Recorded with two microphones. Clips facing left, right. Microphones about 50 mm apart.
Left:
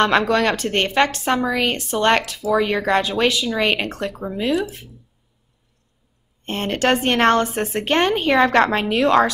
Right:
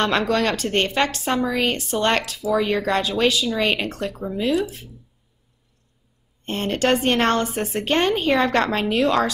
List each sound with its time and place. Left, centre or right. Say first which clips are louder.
0.3 s a woman's voice: left 2 dB; left
4.2 s speech: even; left
6.4 s a woman's voice: left 1 dB; left